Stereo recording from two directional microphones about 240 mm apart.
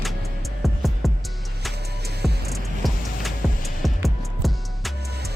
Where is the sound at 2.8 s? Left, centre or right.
Centre.